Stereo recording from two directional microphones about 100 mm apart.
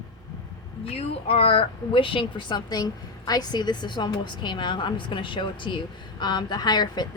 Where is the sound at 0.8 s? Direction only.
75° left (ahead or behind).